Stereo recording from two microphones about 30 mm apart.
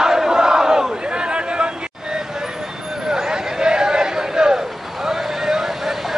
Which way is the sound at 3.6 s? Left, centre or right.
Right.